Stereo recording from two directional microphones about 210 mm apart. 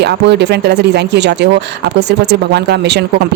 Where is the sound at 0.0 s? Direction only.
55° right (ahead or behind).